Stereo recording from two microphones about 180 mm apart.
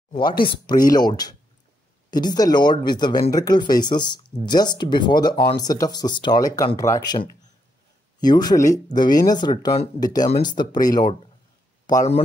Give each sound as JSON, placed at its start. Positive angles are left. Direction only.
{"t": 0.4, "sound": "speech", "side_deg": 25}
{"t": 8.2, "sound": "speech", "side_deg": 20}